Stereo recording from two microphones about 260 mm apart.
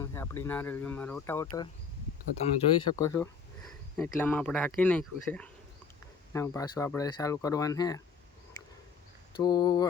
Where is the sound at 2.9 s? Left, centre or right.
Centre.